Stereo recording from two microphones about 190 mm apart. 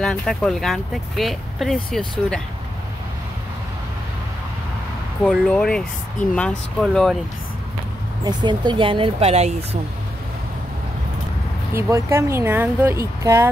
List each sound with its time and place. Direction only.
0.0 s speech: centre (ahead or behind)
5.2 s speech: centre (ahead or behind)
8.2 s speech: 25° right (ahead or behind)
11.7 s speech: 15° right (ahead or behind)